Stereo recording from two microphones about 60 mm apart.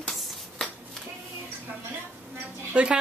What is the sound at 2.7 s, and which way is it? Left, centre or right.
Speech, centre.